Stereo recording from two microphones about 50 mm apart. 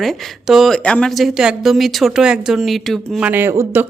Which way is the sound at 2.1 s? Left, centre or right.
Centre.